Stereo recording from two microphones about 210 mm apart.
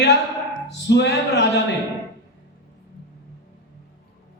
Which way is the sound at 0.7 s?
55° left (ahead or behind).